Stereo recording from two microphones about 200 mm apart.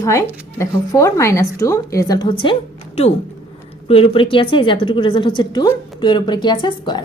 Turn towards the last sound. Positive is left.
turn(degrees=25)  # may be behind; listen again after turning